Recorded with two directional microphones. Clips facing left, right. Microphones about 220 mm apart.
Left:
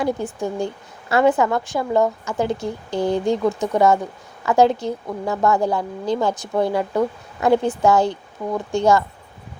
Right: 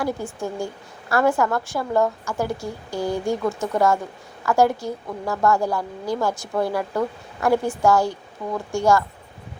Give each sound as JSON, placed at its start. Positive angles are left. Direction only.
{"t": 0.0, "sound": "a woman's voice", "side_deg": 15}